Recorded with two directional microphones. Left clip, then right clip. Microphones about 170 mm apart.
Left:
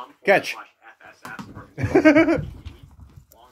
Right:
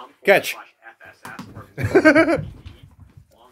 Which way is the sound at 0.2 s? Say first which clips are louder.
Right 2 dB; 25° right (ahead or behind).